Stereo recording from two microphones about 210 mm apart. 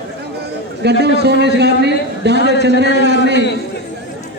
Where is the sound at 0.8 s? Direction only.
55° right (ahead or behind).